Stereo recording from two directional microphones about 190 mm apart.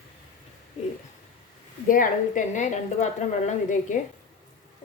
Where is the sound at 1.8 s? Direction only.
45° left (ahead or behind).